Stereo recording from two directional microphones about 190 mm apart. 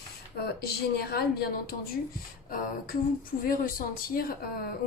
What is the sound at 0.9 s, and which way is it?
Speech, 55° left (ahead or behind).